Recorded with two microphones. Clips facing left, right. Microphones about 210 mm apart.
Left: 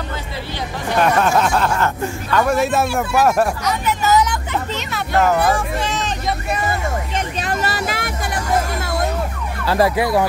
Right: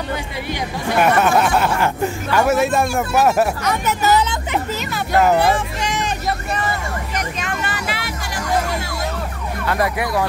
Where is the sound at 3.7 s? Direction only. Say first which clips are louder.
Right 1 dB; 45° right (ahead or behind).